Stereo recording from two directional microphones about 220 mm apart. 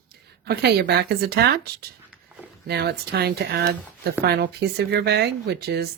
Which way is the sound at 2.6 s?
45° right (ahead or behind).